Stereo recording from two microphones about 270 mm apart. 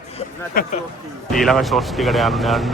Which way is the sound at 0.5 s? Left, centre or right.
Left.